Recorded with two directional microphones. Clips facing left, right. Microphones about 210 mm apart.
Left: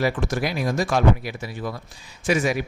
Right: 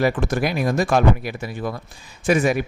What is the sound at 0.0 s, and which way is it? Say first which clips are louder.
Speech: right 3 dB; 55° right (ahead or behind).